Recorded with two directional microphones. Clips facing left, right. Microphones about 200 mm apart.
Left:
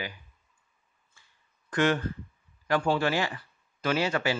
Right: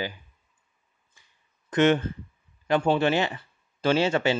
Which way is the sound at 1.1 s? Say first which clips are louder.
Even; 20° right (ahead or behind).